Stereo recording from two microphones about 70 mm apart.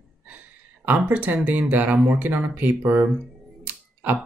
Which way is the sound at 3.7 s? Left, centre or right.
Right.